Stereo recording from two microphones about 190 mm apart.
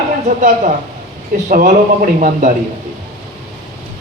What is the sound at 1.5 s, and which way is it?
A woman's voice, 45° right (ahead or behind).